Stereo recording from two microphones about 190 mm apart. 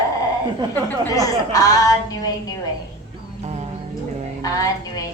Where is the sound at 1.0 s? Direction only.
20° left (ahead or behind).